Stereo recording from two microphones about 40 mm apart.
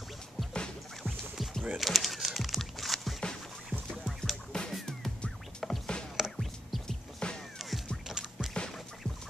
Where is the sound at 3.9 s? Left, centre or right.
Centre.